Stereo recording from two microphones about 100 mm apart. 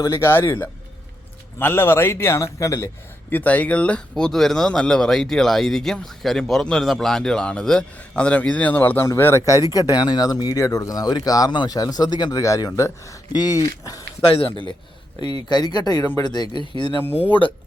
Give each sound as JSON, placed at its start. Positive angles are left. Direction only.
{"t": 0.0, "sound": "a man's voice", "side_deg": 30}
{"t": 14.2, "sound": "speech", "side_deg": 70}
{"t": 15.4, "sound": "speech", "side_deg": 45}